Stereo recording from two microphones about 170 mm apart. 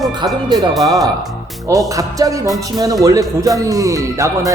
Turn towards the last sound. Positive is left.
turn(degrees=-20)  # may be behind; listen again after turning